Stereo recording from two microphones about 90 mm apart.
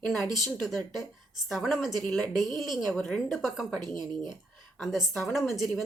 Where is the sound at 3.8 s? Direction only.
55° right (ahead or behind).